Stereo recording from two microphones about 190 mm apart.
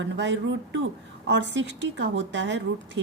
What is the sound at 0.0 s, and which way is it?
A woman's voice, 75° right (ahead or behind).